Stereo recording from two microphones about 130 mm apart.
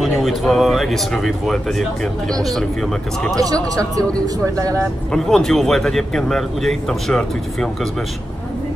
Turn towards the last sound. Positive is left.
turn(degrees=0)  # may be behind; listen again after turning